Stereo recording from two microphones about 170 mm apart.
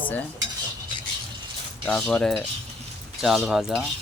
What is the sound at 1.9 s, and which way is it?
Speech, 5° left (ahead or behind).